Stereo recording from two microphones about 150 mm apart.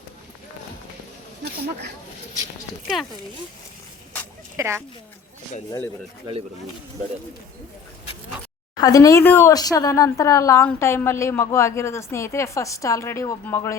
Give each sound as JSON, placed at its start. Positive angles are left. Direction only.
{"t": 4.5, "sound": "speech", "side_deg": -15}
{"t": 8.8, "sound": "a woman's voice", "side_deg": 20}